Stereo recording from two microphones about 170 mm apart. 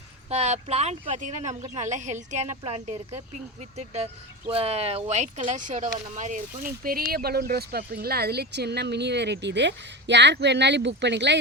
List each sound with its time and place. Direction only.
0.3 s a woman's voice: 40° right (ahead or behind); by 11.3 s 90° right